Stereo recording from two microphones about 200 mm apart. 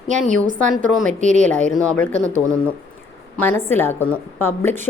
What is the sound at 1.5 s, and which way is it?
Speech, 5° left (ahead or behind).